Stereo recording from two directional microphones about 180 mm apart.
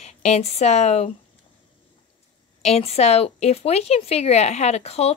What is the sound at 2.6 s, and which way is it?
Speech, 35° left (ahead or behind).